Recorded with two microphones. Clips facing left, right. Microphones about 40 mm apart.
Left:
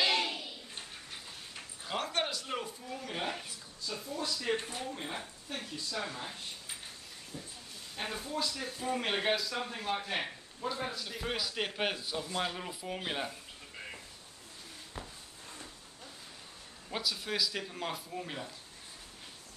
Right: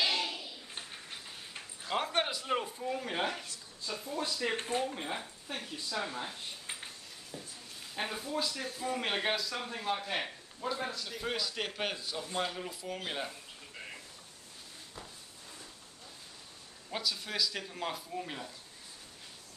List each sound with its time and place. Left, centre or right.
0.1 s a sound: left
2.1 s a man's voice: centre
2.8 s speech: right
4.8 s speech: centre
7.9 s speech: centre
16.9 s speech: centre